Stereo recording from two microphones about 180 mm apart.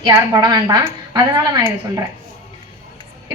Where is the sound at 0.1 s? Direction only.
20° right (ahead or behind).